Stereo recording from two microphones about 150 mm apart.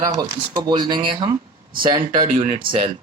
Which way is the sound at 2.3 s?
40° right (ahead or behind).